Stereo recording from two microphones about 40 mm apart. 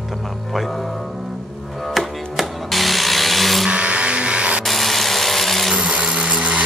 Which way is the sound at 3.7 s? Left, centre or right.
Right.